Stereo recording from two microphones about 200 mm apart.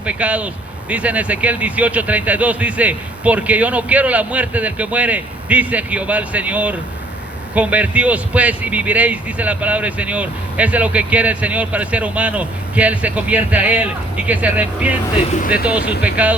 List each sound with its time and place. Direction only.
0.0 s a man's voice: 5° right (ahead or behind)
15.4 s speech: 45° left (ahead or behind)
16.0 s a man's voice: 5° right (ahead or behind)